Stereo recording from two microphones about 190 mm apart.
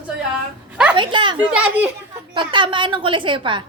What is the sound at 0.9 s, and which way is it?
Speech, 25° right (ahead or behind).